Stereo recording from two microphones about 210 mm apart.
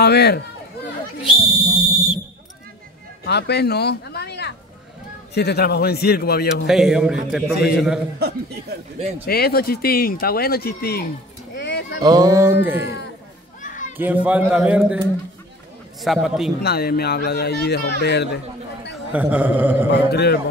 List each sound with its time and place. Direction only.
0.0 s speech: 50° left (ahead or behind)
1.4 s speech: 25° left (ahead or behind)
3.3 s speech: 50° left (ahead or behind)
6.7 s a man's voice: centre (ahead or behind)
9.2 s speech: 45° left (ahead or behind)
11.5 s a sound: 55° left (ahead or behind)
12.0 s a man's voice: 15° right (ahead or behind)
13.6 s children playing: 35° left (ahead or behind)
13.9 s a man's voice: 10° right (ahead or behind)
16.0 s a man's voice: centre (ahead or behind)
16.6 s speech: 50° left (ahead or behind)
19.1 s a man's voice: 5° right (ahead or behind)
19.9 s speech: 50° left (ahead or behind)